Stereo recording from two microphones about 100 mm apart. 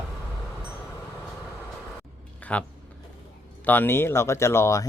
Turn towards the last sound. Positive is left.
turn(degrees=30)  # may be behind; listen again after turning